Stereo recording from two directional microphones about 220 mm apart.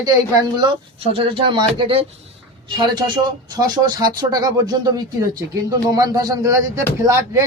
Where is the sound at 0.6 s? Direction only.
25° right (ahead or behind).